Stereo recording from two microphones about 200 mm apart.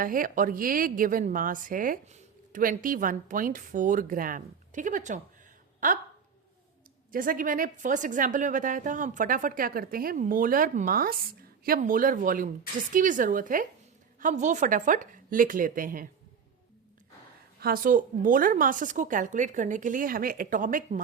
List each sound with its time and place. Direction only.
0.0 s a woman's voice: 45° right (ahead or behind)
7.1 s a woman's voice: 45° right (ahead or behind)
17.6 s speech: 45° right (ahead or behind)